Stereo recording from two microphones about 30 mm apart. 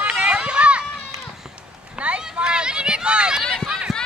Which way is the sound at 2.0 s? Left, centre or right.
Right.